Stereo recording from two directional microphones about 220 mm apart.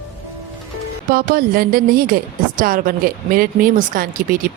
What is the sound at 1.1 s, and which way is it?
A woman's voice, 40° right (ahead or behind).